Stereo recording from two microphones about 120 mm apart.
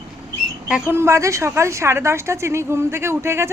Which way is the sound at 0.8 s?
20° right (ahead or behind).